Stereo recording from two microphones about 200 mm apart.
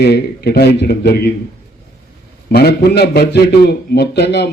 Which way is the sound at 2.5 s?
55° left (ahead or behind).